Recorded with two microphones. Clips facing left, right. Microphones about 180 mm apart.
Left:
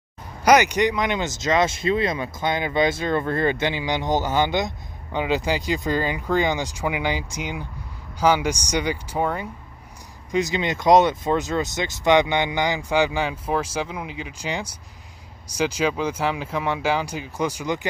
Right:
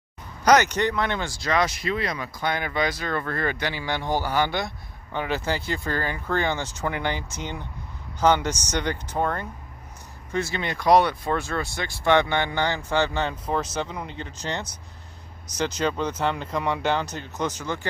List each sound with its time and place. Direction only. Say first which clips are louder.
0.4 s speech: left 2 dB; 10° left (ahead or behind)